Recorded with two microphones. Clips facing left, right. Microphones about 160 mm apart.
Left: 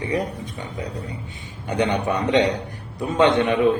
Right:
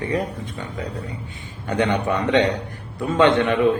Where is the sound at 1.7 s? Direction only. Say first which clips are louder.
Right 1 dB; 15° left (ahead or behind).